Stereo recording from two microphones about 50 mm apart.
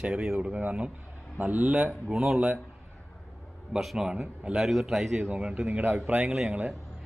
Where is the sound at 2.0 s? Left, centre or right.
Centre.